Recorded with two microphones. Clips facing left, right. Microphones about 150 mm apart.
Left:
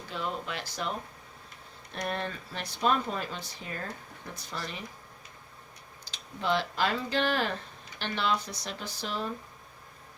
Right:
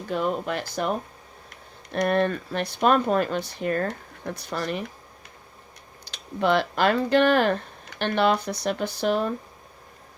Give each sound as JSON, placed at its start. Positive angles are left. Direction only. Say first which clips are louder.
{"t": 0.1, "sound": "speech", "louder": "right 9 dB", "side_deg": -55}
{"t": 1.5, "sound": "speech", "louder": "right 5 dB", "side_deg": -65}
{"t": 6.1, "sound": "speech", "louder": "right 7 dB", "side_deg": -65}